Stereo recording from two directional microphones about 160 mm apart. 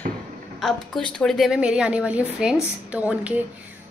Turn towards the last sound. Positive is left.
turn(degrees=-10)  # may be behind; listen again after turning